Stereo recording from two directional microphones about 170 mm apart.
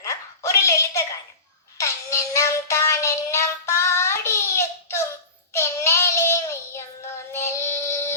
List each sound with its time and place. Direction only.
0.0 s a sound: 20° left (ahead or behind)
1.8 s music: 20° left (ahead or behind)
5.5 s child singing: 15° left (ahead or behind)